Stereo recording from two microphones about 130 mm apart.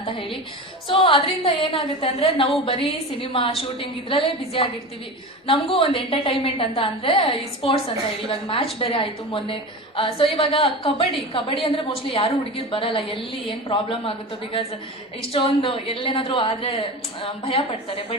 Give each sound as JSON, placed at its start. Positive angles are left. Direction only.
{"t": 0.0, "sound": "a woman's voice", "side_deg": 40}
{"t": 15.3, "sound": "a woman's voice", "side_deg": 45}